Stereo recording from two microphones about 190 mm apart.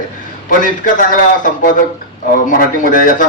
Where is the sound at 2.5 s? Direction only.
45° left (ahead or behind).